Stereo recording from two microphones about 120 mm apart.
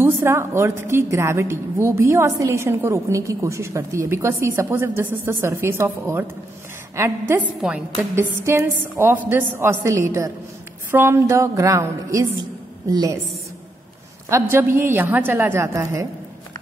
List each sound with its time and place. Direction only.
0.0 s a woman's voice: 20° right (ahead or behind)
8.5 s a woman's voice: 25° right (ahead or behind)
14.3 s a woman's voice: 20° right (ahead or behind)